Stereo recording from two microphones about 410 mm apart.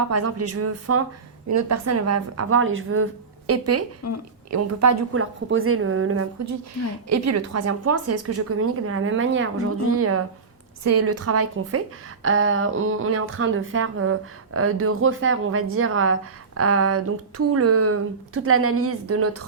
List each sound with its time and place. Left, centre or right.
0.0 s speech: right